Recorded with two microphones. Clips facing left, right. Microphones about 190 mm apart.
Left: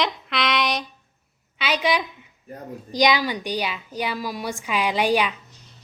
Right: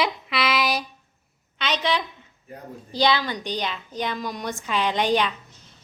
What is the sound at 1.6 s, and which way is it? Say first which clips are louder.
A woman's voice: left 2 dB; 10° left (ahead or behind).